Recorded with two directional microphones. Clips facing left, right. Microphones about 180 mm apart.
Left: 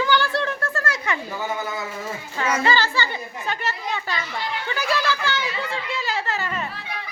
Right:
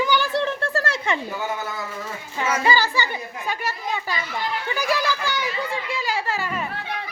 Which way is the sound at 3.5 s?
10° right (ahead or behind).